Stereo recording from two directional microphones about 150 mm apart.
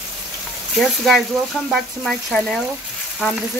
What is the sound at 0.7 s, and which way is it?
Frying, centre (ahead or behind).